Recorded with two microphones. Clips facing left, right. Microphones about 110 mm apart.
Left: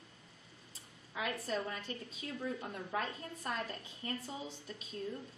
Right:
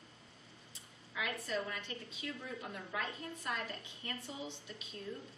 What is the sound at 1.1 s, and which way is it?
A woman's voice, 35° left (ahead or behind).